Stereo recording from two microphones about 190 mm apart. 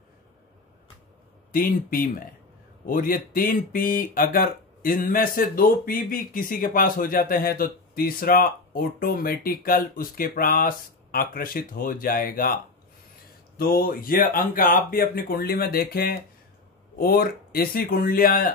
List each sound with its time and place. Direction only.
1.5 s speech: 50° left (ahead or behind)
13.6 s speech: 50° left (ahead or behind)